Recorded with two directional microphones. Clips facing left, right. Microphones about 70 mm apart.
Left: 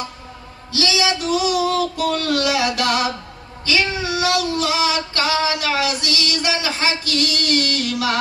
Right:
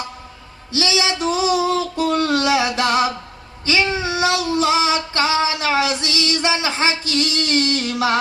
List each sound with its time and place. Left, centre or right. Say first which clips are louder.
0.7 s female singing: even; right